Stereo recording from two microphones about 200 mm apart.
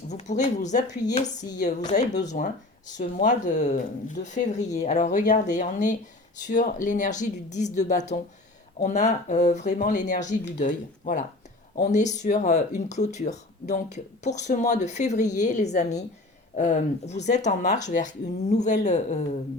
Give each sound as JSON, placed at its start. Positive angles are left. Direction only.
{"t": 0.1, "sound": "speech", "side_deg": 35}
{"t": 1.0, "sound": "speech", "side_deg": 20}
{"t": 1.9, "sound": "speech", "side_deg": 35}